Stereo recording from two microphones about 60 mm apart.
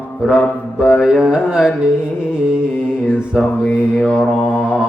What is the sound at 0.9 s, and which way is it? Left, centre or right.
A man's voice, centre.